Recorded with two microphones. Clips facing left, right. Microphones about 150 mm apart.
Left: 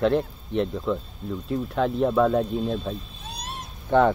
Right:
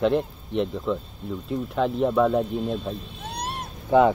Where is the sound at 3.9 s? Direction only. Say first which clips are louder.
Right 2 dB; 5° right (ahead or behind).